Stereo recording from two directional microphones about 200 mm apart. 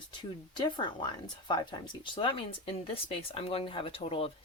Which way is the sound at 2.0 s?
25° left (ahead or behind).